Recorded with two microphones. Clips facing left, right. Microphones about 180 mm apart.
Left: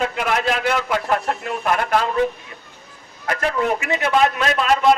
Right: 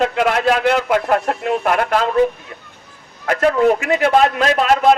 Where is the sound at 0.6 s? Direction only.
50° right (ahead or behind).